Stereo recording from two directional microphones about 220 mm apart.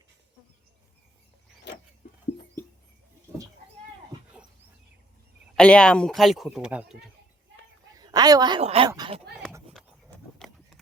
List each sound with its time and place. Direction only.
2.0 s a sound: 40° left (ahead or behind)
4.1 s dog: 15° right (ahead or behind)
5.5 s speech: 5° left (ahead or behind)
7.9 s a woman's voice: 15° right (ahead or behind)
9.7 s horse: centre (ahead or behind)